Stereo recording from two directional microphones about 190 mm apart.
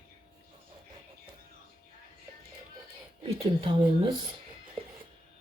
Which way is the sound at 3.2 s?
30° right (ahead or behind).